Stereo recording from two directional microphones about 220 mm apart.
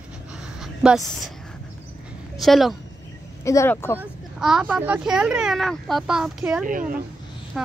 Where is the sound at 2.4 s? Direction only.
Centre (ahead or behind).